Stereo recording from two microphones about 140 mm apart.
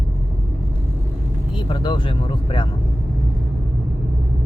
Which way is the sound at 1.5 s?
35° left (ahead or behind).